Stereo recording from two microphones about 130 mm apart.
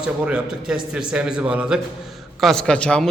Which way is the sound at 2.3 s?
5° left (ahead or behind).